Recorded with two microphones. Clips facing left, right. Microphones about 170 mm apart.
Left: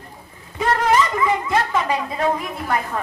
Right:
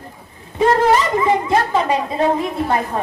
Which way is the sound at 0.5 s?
25° right (ahead or behind).